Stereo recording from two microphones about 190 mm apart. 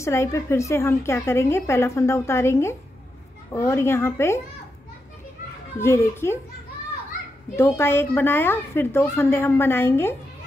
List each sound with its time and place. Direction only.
0.0 s a woman's voice: 15° left (ahead or behind)
5.8 s a woman's voice: 15° left (ahead or behind)
7.5 s a woman's voice: 15° left (ahead or behind)